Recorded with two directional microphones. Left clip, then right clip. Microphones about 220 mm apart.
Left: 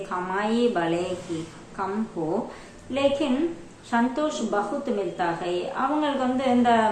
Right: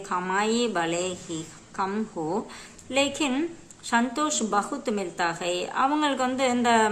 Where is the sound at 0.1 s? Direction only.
20° right (ahead or behind).